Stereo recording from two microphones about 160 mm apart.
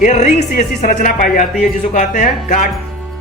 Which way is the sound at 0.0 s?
45° left (ahead or behind).